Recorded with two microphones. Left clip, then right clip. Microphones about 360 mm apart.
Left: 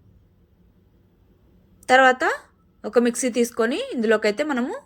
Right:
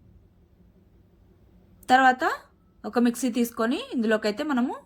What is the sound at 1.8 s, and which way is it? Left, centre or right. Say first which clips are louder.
A woman's voice: left 3 dB; centre.